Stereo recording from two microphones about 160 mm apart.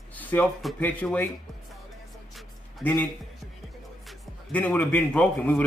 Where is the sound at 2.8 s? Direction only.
10° left (ahead or behind).